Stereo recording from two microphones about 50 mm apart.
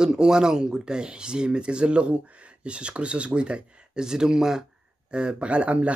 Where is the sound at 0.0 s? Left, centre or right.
Centre.